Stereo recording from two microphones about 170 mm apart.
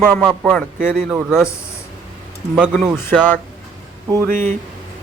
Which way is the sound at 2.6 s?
5° right (ahead or behind).